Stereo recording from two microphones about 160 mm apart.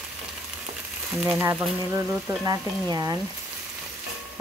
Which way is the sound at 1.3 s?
15° right (ahead or behind).